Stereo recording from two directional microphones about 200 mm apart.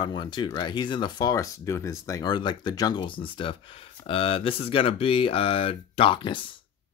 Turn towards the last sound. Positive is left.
turn(degrees=25)  # may be behind; listen again after turning